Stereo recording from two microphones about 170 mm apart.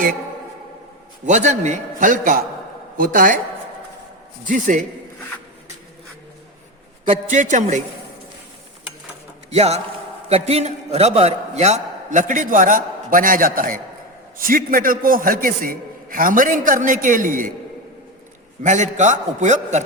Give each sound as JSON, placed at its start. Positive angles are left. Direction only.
{"t": 1.2, "sound": "a man's voice", "side_deg": -45}
{"t": 4.4, "sound": "a man's voice", "side_deg": -50}
{"t": 7.3, "sound": "a man's voice", "side_deg": -45}
{"t": 9.5, "sound": "a man's voice", "side_deg": -40}
{"t": 18.6, "sound": "a man's voice", "side_deg": -45}